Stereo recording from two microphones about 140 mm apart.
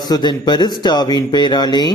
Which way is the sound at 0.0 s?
30° left (ahead or behind).